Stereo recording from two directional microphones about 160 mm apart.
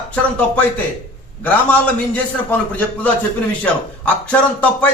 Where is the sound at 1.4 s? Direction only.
10° left (ahead or behind).